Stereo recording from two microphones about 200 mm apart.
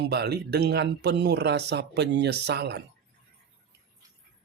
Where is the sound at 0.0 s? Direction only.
55° right (ahead or behind).